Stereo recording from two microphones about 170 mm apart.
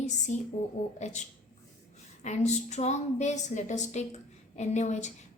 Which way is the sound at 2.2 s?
40° left (ahead or behind).